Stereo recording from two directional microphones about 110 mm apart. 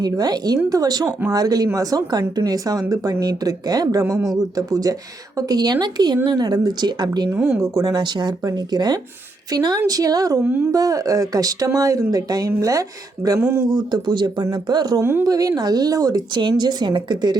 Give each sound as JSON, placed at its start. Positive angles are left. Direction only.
{"t": 0.0, "sound": "a woman's voice", "side_deg": -40}
{"t": 4.0, "sound": "a woman's voice", "side_deg": -25}
{"t": 10.4, "sound": "speech", "side_deg": -15}
{"t": 10.7, "sound": "a woman's voice", "side_deg": -30}